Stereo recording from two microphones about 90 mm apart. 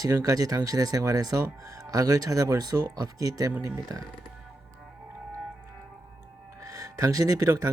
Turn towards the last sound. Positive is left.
turn(degrees=-40)  # may be behind; listen again after turning